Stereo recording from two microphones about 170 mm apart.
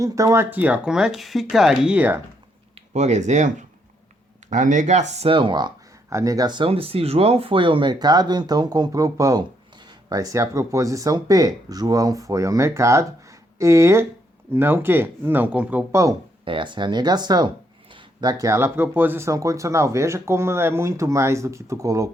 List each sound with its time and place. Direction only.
0.0 s speech: 20° right (ahead or behind)
2.9 s speech: 40° right (ahead or behind)
5.1 s speech: 35° right (ahead or behind); by 16.1 s 15° right (ahead or behind)
16.5 s speech: 30° right (ahead or behind)